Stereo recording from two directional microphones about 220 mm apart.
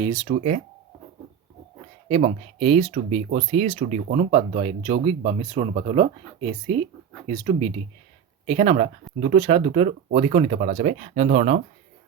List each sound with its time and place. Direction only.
0.0 s speech: 15° right (ahead or behind)
2.0 s speech: 25° right (ahead or behind)